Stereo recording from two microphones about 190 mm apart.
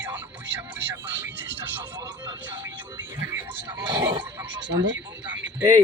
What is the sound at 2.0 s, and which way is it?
Speech, 20° right (ahead or behind).